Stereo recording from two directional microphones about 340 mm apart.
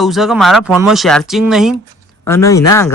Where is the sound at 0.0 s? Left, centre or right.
Centre.